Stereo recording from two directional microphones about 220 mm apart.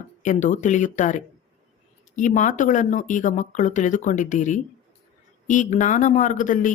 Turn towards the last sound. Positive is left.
turn(degrees=35)  # may be behind; listen again after turning